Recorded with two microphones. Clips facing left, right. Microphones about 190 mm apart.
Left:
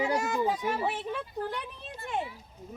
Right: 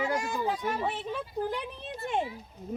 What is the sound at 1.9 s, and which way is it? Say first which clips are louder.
Speech: right 3 dB; 25° right (ahead or behind).